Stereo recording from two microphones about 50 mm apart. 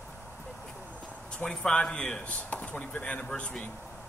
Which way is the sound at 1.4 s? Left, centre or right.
Centre.